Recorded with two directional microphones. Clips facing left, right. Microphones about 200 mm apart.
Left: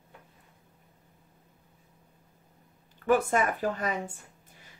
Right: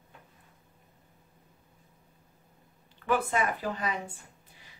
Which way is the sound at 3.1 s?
45° left (ahead or behind).